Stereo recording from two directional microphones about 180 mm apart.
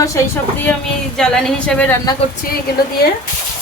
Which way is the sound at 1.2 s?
5° left (ahead or behind).